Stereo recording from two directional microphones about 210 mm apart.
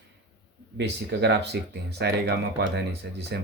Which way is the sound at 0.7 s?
55° right (ahead or behind).